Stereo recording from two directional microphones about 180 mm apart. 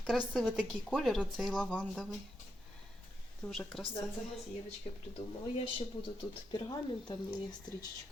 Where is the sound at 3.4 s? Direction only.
Centre (ahead or behind).